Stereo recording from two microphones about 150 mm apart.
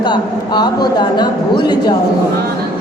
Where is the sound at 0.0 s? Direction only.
30° left (ahead or behind).